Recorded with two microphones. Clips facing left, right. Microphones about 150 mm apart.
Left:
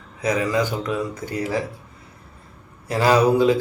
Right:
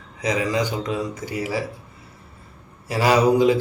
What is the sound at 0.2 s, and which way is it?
Mantra, 50° left (ahead or behind).